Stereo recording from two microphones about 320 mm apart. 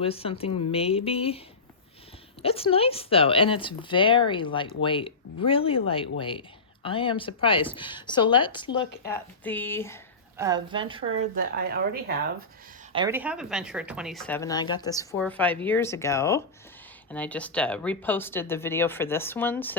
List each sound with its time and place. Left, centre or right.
0.0 s speech: centre
2.4 s speech: centre
10.3 s speech: centre
11.3 s speech: right
12.9 s speech: centre